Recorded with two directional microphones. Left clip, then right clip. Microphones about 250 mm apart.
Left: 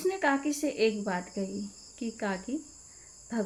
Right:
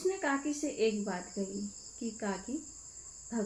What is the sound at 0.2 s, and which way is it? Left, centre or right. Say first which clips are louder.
Speech: left 5 dB; left.